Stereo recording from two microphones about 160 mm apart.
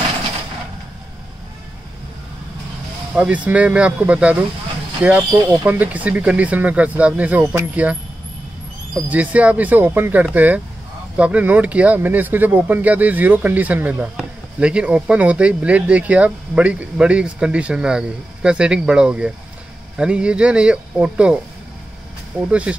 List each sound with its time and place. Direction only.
3.4 s speech: 10° right (ahead or behind)
22.5 s speech: 5° right (ahead or behind)